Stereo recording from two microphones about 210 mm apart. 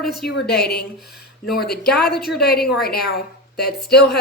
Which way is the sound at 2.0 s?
50° left (ahead or behind).